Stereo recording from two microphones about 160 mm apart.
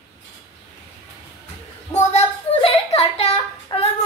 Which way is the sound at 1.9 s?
40° left (ahead or behind).